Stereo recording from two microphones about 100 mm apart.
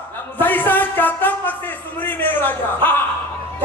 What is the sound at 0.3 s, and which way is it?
Music, 20° left (ahead or behind).